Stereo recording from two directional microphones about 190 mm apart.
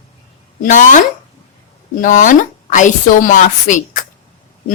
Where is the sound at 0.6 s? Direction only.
40° left (ahead or behind).